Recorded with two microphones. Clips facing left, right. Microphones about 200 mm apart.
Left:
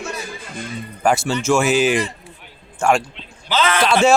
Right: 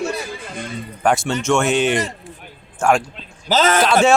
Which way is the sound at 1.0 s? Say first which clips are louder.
Even; centre (ahead or behind).